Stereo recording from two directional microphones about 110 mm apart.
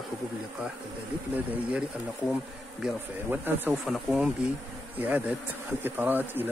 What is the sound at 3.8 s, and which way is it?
Speech, 5° right (ahead or behind).